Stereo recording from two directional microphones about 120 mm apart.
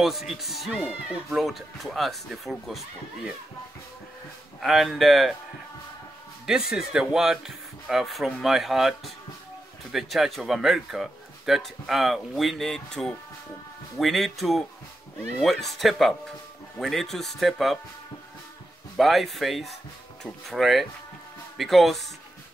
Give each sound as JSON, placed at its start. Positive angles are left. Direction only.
{"t": 0.0, "sound": "a man's voice", "side_deg": 0}
{"t": 4.6, "sound": "a man's voice", "side_deg": 0}
{"t": 6.4, "sound": "a man's voice", "side_deg": -5}
{"t": 18.9, "sound": "a man's voice", "side_deg": 0}